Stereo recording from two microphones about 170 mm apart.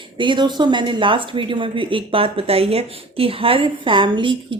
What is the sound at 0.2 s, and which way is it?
A woman's voice, 25° right (ahead or behind).